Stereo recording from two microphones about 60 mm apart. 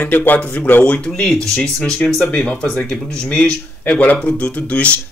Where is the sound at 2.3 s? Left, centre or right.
Centre.